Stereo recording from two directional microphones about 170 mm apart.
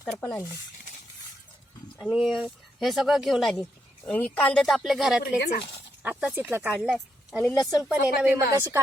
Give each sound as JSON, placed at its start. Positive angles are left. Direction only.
{"t": 0.1, "sound": "speech", "side_deg": 10}
{"t": 2.0, "sound": "speech", "side_deg": 0}
{"t": 5.4, "sound": "speech", "side_deg": 75}
{"t": 6.0, "sound": "speech", "side_deg": -10}
{"t": 7.6, "sound": "speech", "side_deg": 20}
{"t": 7.9, "sound": "a woman's voice", "side_deg": -10}